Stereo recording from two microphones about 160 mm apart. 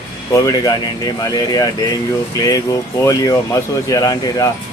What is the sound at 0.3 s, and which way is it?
A man's voice, 20° left (ahead or behind).